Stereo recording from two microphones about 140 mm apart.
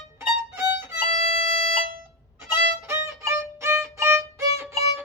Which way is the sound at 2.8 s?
20° right (ahead or behind).